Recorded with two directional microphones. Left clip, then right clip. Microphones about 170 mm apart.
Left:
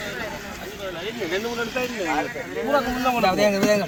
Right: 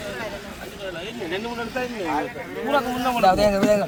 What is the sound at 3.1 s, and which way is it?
Speech, 10° right (ahead or behind).